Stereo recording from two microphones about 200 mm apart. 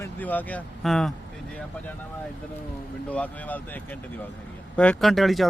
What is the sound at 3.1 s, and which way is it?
Speech, 5° left (ahead or behind).